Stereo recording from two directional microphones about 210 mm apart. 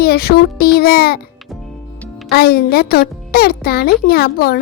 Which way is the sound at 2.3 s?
45° left (ahead or behind).